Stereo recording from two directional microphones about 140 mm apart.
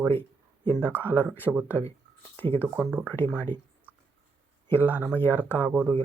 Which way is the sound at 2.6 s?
10° right (ahead or behind).